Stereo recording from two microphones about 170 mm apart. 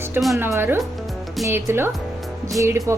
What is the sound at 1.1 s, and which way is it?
Music, centre (ahead or behind).